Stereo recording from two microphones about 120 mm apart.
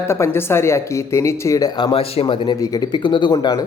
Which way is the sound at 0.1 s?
20° left (ahead or behind).